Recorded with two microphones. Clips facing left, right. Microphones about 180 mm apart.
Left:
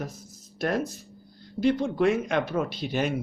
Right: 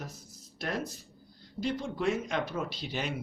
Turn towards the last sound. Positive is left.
turn(degrees=50)  # may be behind; listen again after turning